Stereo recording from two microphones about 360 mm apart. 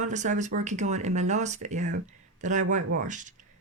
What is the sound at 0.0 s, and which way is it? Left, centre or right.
Speech, centre.